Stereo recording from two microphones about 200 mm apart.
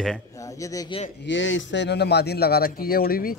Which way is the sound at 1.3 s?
65° left (ahead or behind).